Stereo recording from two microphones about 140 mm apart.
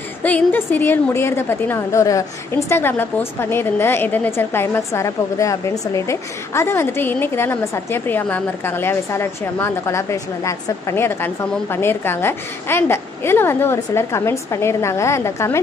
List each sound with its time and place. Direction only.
0.2 s a woman's voice: 10° left (ahead or behind)